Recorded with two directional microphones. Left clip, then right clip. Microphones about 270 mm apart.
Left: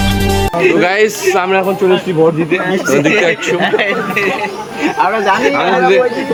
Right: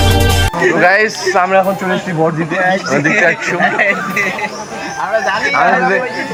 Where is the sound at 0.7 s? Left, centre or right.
Centre.